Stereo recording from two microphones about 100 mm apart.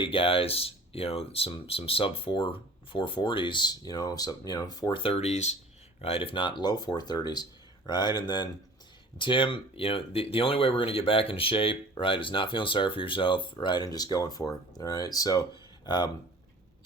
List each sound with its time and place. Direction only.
0.0 s speech: 65° left (ahead or behind); by 5.0 s 45° left (ahead or behind)
5.0 s speech: 90° left
6.0 s speech: 70° left (ahead or behind); by 8.4 s 45° left (ahead or behind)
9.1 s speech: 55° left (ahead or behind); by 15.4 s 35° left (ahead or behind)